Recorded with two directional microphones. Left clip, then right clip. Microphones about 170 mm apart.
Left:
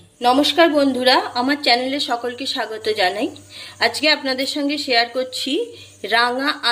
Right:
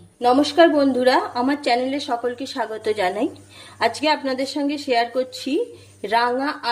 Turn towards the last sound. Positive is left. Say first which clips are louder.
# left 2 dB
turn(degrees=-25)  # may be behind; listen again after turning